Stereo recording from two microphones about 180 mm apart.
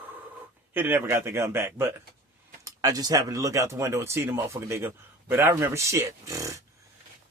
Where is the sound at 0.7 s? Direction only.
10° right (ahead or behind).